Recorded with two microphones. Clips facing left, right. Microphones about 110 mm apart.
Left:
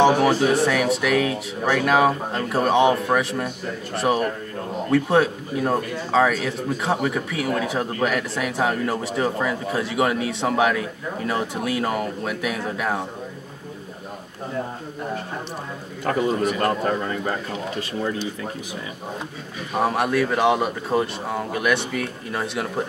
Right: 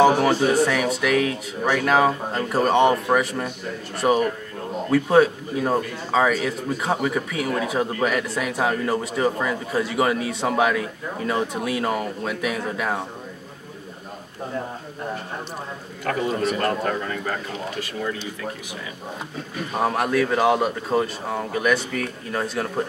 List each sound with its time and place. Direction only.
0.0 s speech: centre (ahead or behind)
16.1 s speech: 30° left (ahead or behind)
19.8 s speech: centre (ahead or behind)